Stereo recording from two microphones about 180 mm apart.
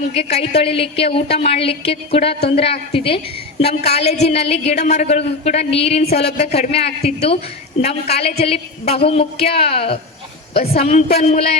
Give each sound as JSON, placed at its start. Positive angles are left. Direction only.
{"t": 0.1, "sound": "a man's voice", "side_deg": 35}